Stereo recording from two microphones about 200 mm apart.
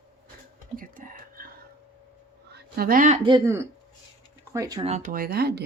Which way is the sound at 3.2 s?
20° right (ahead or behind).